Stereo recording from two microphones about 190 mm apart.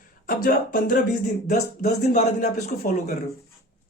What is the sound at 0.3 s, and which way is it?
Speech, 50° left (ahead or behind).